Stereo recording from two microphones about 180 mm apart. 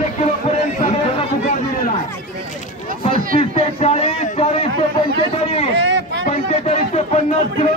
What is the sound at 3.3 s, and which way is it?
A man's voice, 35° left (ahead or behind).